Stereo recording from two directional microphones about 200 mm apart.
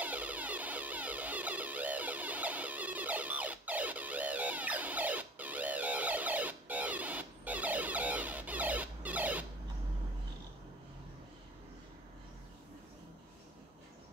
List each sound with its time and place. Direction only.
0.0 s music: 10° right (ahead or behind)